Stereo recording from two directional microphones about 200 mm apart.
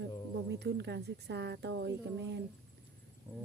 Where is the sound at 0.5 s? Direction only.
55° right (ahead or behind).